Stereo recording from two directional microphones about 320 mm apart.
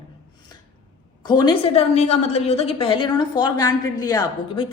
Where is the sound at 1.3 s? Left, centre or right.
Centre.